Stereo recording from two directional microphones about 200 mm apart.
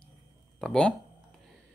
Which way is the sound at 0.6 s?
5° left (ahead or behind).